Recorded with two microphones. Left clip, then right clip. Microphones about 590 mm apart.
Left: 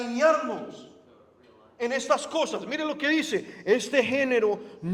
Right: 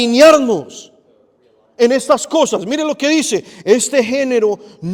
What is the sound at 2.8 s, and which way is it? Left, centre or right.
A man's voice, right.